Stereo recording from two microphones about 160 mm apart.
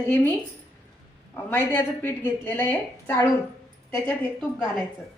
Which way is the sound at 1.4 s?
15° left (ahead or behind).